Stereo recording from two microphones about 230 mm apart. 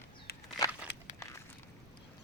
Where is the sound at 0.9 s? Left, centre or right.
Left.